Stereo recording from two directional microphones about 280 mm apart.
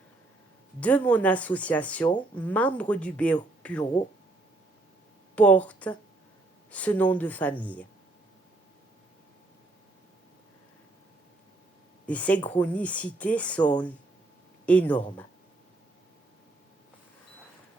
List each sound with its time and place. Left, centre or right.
0.8 s speech: centre
5.3 s speech: centre
12.0 s speech: centre